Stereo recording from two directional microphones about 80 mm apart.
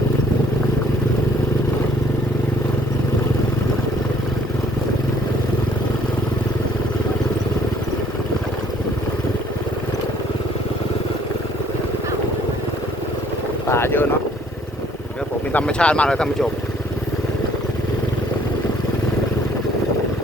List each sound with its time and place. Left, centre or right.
13.7 s boat: left
15.5 s speech: centre